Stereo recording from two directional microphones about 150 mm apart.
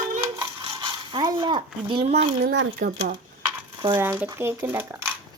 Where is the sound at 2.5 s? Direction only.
70° right (ahead or behind).